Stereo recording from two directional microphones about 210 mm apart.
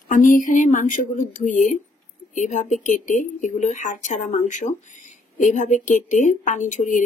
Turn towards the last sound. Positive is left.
turn(degrees=35)  # may be behind; listen again after turning